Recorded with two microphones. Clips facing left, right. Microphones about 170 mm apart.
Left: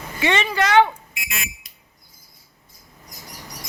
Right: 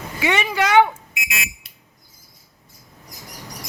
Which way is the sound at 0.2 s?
10° right (ahead or behind).